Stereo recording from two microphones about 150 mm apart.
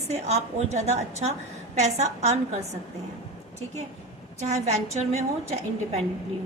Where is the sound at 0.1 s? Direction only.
50° right (ahead or behind).